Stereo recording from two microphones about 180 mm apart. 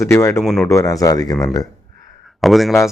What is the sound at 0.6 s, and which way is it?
Speech, 15° left (ahead or behind).